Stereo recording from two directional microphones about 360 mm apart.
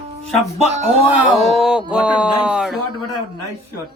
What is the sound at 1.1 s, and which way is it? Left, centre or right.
Speech, centre.